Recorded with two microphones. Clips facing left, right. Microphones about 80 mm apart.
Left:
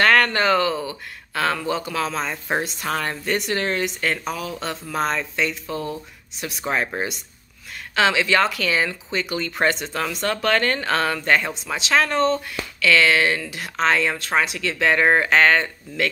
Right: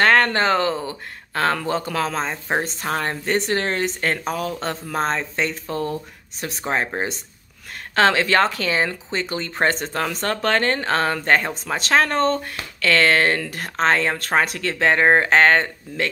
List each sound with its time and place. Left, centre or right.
0.0 s speech: right
7.9 s speech: right